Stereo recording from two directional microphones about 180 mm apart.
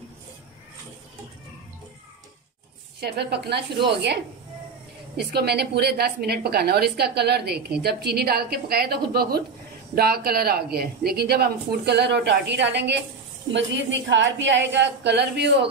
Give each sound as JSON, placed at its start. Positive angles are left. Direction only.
{"t": 3.0, "sound": "a woman's voice", "side_deg": -65}
{"t": 13.5, "sound": "a woman's voice", "side_deg": -85}